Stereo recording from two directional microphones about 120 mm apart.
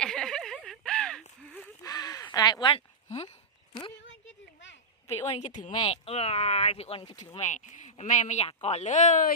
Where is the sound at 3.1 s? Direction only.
60° left (ahead or behind).